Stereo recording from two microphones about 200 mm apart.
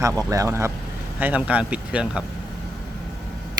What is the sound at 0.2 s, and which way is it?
Speech, 15° right (ahead or behind).